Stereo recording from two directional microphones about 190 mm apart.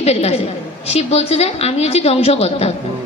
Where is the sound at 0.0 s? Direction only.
35° left (ahead or behind).